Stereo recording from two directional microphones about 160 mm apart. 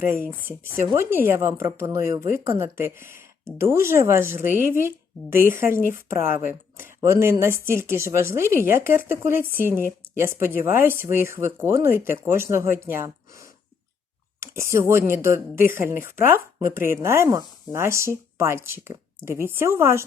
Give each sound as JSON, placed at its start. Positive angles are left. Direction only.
{"t": 0.0, "sound": "speech", "side_deg": -15}
{"t": 6.2, "sound": "speech", "side_deg": 60}
{"t": 6.5, "sound": "speech", "side_deg": -15}